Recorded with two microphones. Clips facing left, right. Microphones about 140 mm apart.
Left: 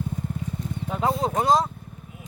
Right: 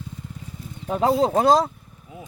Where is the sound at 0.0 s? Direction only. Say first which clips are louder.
Left 8 dB; 50° left (ahead or behind).